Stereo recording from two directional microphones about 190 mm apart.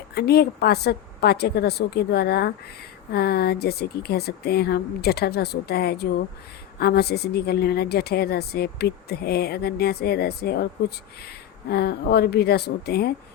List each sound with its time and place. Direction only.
0.1 s a woman's voice: 55° left (ahead or behind)